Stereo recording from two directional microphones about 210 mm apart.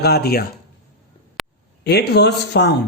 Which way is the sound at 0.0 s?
50° left (ahead or behind).